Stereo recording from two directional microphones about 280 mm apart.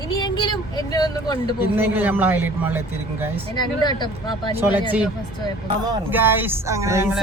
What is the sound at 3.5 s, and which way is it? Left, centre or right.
Speech, centre.